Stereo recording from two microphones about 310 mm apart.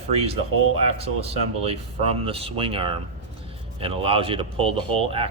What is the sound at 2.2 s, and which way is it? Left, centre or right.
Speech, centre.